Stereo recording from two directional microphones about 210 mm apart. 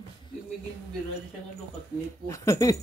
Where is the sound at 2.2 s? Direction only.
15° left (ahead or behind).